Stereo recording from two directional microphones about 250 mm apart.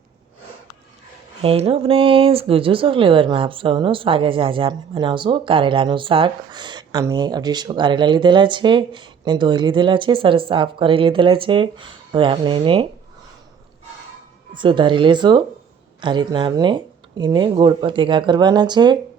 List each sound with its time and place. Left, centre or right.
1.4 s speech: right
14.5 s speech: centre